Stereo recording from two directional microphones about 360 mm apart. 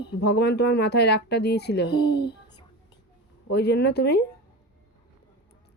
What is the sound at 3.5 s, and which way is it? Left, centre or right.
Speech, left.